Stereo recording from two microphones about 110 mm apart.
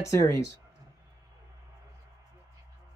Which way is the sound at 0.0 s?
25° left (ahead or behind).